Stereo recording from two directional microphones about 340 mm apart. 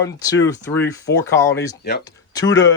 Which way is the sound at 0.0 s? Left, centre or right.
Centre.